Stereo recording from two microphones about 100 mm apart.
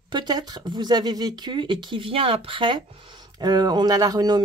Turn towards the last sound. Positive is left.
turn(degrees=-40)  # may be behind; listen again after turning